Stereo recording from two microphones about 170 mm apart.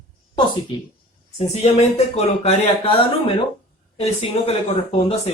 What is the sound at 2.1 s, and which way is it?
Speech, 40° left (ahead or behind).